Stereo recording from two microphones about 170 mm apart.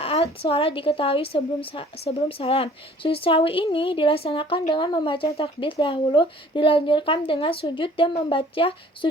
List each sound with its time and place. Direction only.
0.0 s a woman's voice: 35° left (ahead or behind)